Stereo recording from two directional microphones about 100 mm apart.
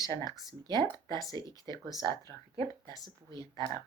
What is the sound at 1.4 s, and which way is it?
Speech, 45° right (ahead or behind).